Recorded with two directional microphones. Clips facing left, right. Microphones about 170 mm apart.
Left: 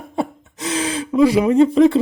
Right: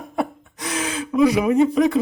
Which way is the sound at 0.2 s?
25° left (ahead or behind).